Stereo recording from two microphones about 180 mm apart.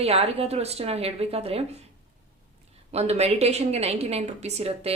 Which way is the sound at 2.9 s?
35° right (ahead or behind).